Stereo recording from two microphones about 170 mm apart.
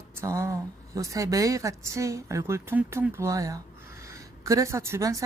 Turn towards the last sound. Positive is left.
turn(degrees=-20)  # may be behind; listen again after turning